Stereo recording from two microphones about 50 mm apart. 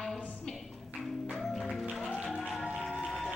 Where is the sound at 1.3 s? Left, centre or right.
Centre.